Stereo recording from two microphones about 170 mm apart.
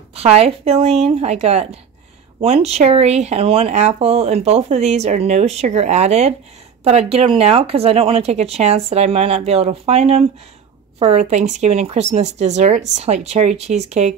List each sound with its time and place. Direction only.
0.1 s speech: 35° right (ahead or behind)